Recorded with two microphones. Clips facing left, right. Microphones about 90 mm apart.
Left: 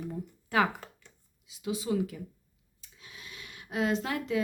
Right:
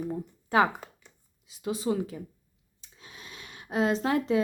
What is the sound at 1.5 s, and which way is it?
Speech, 40° right (ahead or behind).